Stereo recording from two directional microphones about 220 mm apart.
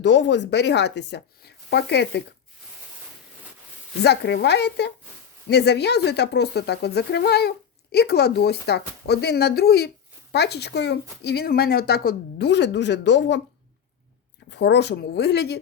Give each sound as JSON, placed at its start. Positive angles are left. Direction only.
{"t": 0.0, "sound": "speech", "side_deg": 50}
{"t": 4.0, "sound": "speech", "side_deg": 50}
{"t": 14.5, "sound": "speech", "side_deg": 50}